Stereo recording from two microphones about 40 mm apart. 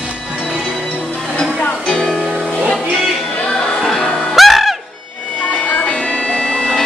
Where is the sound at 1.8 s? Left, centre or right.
Centre.